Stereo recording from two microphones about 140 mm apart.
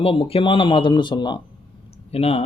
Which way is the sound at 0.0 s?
40° left (ahead or behind).